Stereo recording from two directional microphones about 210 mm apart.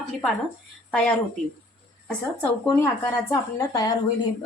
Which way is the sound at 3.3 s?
15° left (ahead or behind).